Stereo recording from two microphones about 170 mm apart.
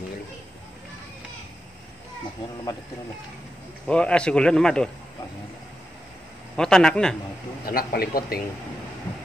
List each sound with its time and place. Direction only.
3.8 s speech: 5° left (ahead or behind)
6.5 s speech: 5° left (ahead or behind)
7.6 s speech: 60° left (ahead or behind)